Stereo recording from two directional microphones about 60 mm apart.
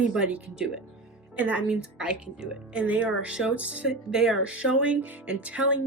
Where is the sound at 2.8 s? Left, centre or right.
Right.